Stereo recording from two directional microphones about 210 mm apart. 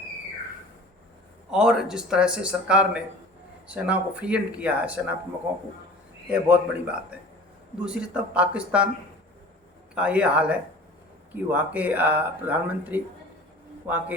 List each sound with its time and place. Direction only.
1.5 s speech: 5° right (ahead or behind)
6.3 s speech: 5° right (ahead or behind)
9.9 s speech: 5° right (ahead or behind)